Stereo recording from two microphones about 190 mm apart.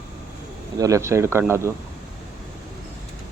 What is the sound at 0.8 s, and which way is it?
Speech, 15° right (ahead or behind).